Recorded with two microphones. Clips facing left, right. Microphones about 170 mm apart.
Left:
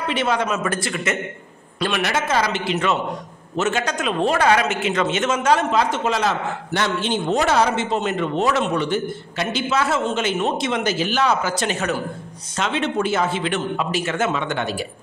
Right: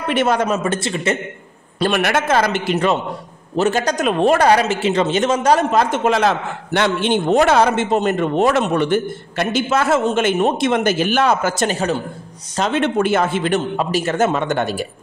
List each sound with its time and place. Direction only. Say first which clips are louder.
0.1 s a man's voice: right 5 dB; 45° right (ahead or behind)
0.7 s a man's voice: right 4 dB; 25° right (ahead or behind)
1.8 s a man's voice: right 5 dB; 50° right (ahead or behind)
12.8 s a man's voice: right 4 dB; 55° right (ahead or behind)